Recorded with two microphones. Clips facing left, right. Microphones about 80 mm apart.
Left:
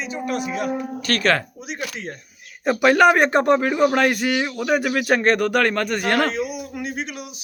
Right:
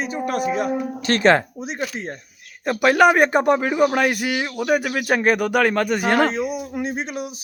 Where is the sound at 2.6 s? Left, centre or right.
Centre.